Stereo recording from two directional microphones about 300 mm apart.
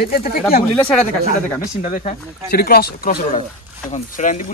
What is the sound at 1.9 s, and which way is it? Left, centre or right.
Speech, left.